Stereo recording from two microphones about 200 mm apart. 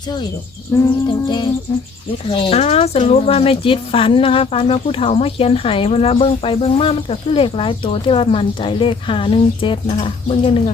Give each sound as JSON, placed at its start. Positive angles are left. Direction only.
{"t": 0.8, "sound": "speech", "side_deg": 20}